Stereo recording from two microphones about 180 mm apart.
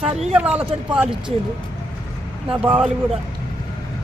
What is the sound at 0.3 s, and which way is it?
Speech, 5° right (ahead or behind).